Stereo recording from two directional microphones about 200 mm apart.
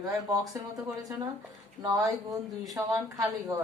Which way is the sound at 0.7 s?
15° right (ahead or behind).